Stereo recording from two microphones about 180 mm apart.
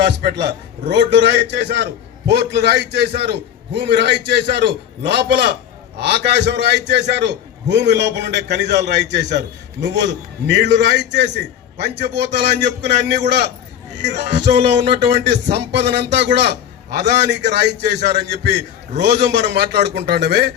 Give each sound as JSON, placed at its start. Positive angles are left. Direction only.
{"t": 0.0, "sound": "a man's voice", "side_deg": -65}